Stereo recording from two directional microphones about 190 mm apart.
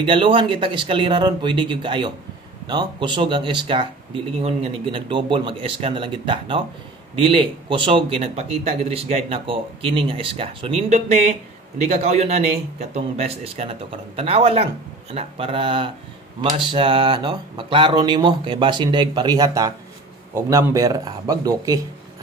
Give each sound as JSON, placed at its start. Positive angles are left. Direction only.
{"t": 0.0, "sound": "speech", "side_deg": -25}